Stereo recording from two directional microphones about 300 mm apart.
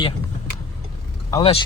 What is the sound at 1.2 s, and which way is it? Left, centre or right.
Speech, centre.